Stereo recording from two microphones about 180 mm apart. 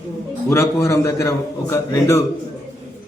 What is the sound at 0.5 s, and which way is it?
A man's voice, 15° left (ahead or behind).